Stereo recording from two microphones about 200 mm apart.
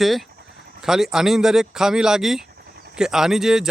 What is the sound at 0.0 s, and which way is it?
Speech, centre (ahead or behind).